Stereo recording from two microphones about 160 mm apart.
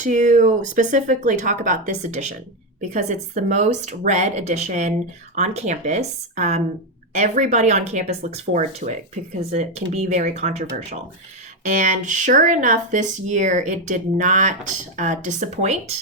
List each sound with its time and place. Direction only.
0.0 s speech: 50° right (ahead or behind)